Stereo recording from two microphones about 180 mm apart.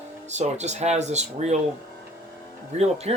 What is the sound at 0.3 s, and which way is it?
Speech, 40° right (ahead or behind).